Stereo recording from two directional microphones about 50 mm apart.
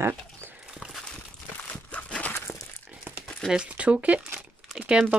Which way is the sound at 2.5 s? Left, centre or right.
Left.